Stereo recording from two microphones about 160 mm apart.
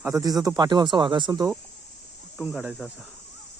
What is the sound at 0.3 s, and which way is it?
Speech, 25° right (ahead or behind).